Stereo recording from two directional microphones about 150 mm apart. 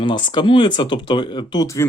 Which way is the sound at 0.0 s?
30° left (ahead or behind).